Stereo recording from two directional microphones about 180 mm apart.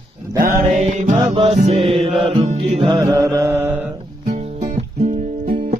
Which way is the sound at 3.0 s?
15° right (ahead or behind).